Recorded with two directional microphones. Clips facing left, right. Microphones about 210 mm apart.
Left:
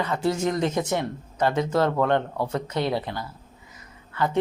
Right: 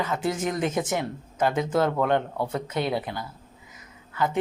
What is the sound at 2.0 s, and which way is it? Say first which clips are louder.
Speech: left 1 dB; 15° right (ahead or behind).